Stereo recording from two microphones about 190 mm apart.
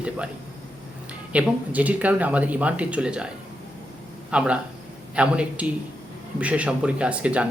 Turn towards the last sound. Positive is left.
turn(degrees=-5)  # may be behind; listen again after turning